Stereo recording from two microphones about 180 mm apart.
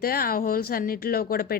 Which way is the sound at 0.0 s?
55° left (ahead or behind).